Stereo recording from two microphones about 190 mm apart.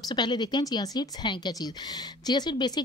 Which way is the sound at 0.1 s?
25° left (ahead or behind).